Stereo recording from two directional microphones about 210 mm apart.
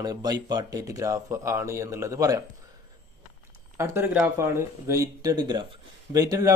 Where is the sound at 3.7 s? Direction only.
10° right (ahead or behind).